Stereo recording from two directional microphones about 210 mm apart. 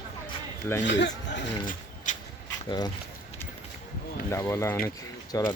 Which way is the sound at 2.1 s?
35° left (ahead or behind).